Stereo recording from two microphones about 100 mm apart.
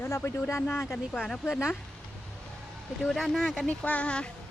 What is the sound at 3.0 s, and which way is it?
Speech, centre (ahead or behind).